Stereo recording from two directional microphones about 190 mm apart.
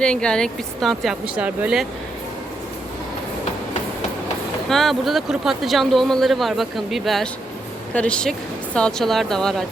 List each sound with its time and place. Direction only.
0.0 s speech: 5° left (ahead or behind)
4.7 s speech: centre (ahead or behind)